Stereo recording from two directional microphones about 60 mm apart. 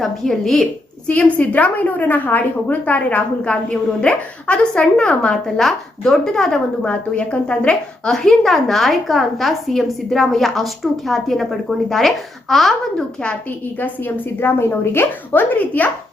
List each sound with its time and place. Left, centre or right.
0.0 s a woman's voice: centre
1.0 s a woman's voice: left; by 12.7 s centre
14.4 s speech: left